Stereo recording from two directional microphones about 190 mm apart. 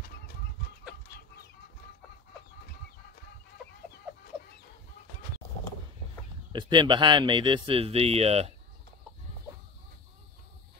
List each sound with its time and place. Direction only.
6.5 s speech: 25° right (ahead or behind)